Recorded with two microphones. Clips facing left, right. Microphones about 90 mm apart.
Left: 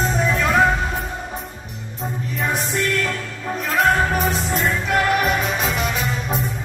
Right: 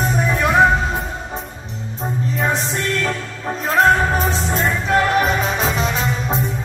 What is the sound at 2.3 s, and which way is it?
Music, 30° right (ahead or behind).